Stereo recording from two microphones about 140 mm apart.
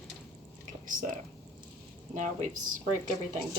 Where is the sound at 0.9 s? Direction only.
75° right (ahead or behind).